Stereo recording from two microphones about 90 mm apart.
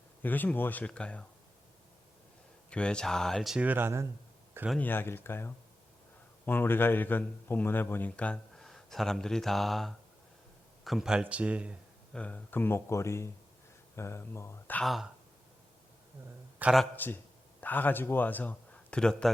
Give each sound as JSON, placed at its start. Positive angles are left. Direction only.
{"t": 0.2, "sound": "speech", "side_deg": 20}
{"t": 2.6, "sound": "speech", "side_deg": 10}
{"t": 3.5, "sound": "speech", "side_deg": -15}
{"t": 4.8, "sound": "speech", "side_deg": 25}
{"t": 12.1, "sound": "speech", "side_deg": 15}
{"t": 16.6, "sound": "speech", "side_deg": -20}
{"t": 17.0, "sound": "a man's voice", "side_deg": 20}